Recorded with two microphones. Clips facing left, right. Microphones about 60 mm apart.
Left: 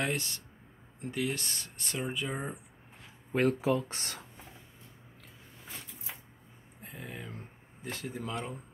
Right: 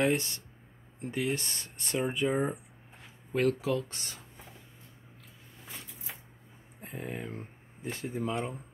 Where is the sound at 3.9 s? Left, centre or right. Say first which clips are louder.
Left 3 dB; left.